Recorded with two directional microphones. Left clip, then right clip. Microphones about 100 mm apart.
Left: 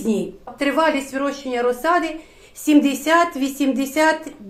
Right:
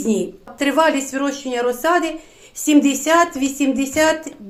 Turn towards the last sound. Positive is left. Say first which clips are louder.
# right 1 dB
turn(degrees=-25)  # may be behind; listen again after turning